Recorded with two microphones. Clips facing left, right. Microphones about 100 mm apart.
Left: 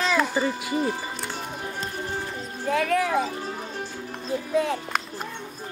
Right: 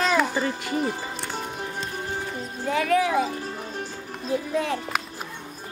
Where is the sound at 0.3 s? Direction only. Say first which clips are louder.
Left 1 dB; 5° left (ahead or behind).